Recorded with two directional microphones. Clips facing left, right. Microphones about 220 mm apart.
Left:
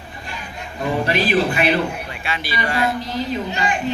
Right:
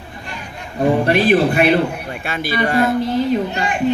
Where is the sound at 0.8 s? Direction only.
50° right (ahead or behind).